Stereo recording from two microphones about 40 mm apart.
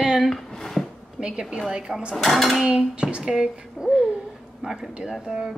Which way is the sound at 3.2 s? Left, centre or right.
Centre.